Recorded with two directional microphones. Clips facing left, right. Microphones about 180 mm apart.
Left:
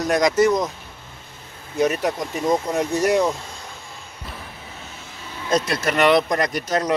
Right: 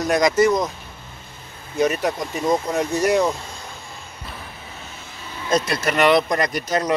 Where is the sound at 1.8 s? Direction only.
5° left (ahead or behind).